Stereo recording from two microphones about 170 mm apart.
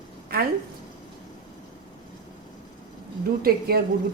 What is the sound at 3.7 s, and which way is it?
Speech, 65° right (ahead or behind).